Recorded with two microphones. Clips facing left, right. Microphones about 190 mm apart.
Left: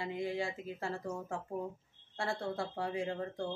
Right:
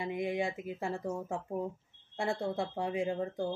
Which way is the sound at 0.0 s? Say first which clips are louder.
Right 3 dB; 20° right (ahead or behind).